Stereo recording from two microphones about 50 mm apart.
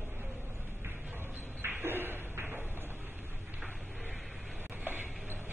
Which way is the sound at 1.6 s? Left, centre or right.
Right.